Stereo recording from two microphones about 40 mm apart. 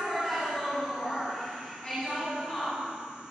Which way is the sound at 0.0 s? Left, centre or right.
Centre.